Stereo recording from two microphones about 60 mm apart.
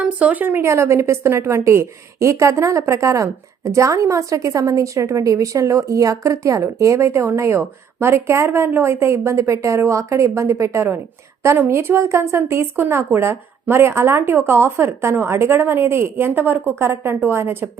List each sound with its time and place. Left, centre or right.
0.2 s speech: right
0.6 s a woman's voice: right
16.1 s a woman's voice: right